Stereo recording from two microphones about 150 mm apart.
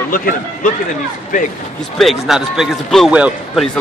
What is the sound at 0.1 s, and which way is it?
Speech, 65° left (ahead or behind).